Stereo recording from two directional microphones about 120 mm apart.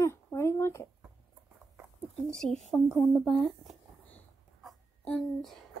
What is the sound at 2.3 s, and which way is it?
Speech, 5° left (ahead or behind).